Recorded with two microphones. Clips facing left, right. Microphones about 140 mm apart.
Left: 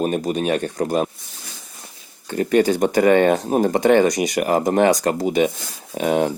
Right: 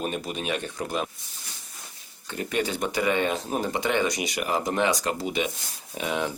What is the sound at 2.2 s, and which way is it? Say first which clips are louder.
Speech: left 11 dB; 45° left (ahead or behind).